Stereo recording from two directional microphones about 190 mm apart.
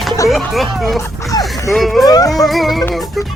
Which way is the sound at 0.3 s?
Centre (ahead or behind).